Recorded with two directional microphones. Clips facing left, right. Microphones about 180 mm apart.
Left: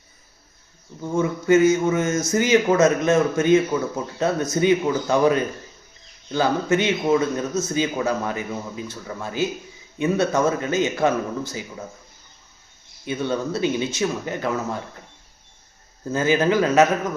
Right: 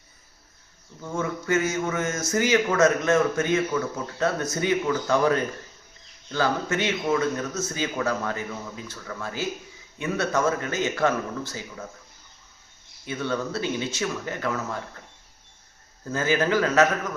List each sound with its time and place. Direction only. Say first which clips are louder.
1.0 s speech: left 7 dB; 20° left (ahead or behind)
13.1 s speech: left 4 dB; 20° left (ahead or behind)
16.0 s speech: left 4 dB; 20° left (ahead or behind)